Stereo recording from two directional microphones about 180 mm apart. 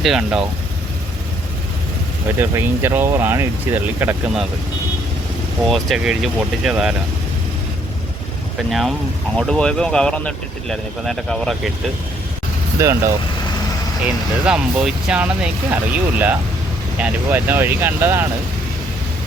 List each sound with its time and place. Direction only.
0.0 s speech: 5° right (ahead or behind)
2.4 s speech: 10° right (ahead or behind)
5.6 s speech: centre (ahead or behind)
8.7 s speech: centre (ahead or behind)
12.8 s speech: 15° right (ahead or behind)
14.0 s speech: 5° right (ahead or behind)